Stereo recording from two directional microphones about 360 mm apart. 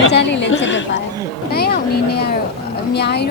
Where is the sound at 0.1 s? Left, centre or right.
Left.